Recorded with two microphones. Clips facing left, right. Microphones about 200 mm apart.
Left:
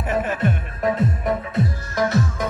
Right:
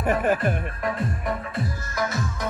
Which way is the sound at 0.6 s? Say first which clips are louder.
Left 5 dB; centre (ahead or behind).